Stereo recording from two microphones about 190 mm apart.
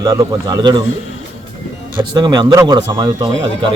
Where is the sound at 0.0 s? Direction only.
20° right (ahead or behind).